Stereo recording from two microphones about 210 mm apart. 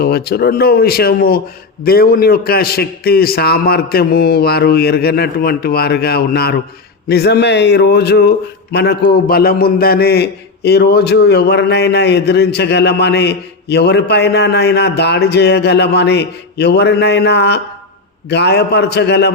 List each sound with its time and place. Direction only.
0.0 s a man's voice: 50° left (ahead or behind)